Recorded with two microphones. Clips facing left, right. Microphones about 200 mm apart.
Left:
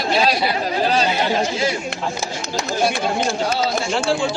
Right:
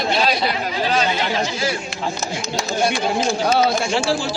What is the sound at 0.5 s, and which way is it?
Speech, 35° left (ahead or behind).